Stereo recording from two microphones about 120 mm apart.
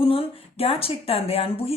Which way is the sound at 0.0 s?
50° left (ahead or behind).